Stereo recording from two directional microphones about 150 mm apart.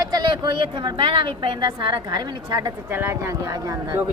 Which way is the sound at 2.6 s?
15° right (ahead or behind).